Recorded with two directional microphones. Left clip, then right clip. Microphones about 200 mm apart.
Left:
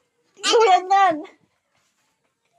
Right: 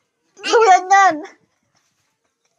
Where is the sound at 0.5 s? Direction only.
25° right (ahead or behind).